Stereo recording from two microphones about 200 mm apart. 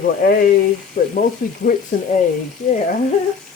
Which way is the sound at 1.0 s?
40° left (ahead or behind).